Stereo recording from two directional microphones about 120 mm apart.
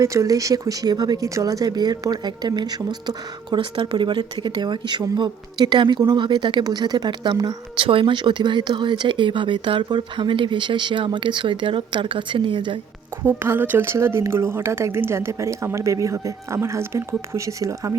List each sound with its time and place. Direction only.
0.0 s speech: 25° right (ahead or behind); by 12.8 s 40° right (ahead or behind)
13.2 s speech: 20° right (ahead or behind)